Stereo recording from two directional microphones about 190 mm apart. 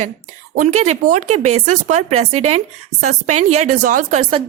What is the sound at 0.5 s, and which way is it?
Speech, 40° right (ahead or behind).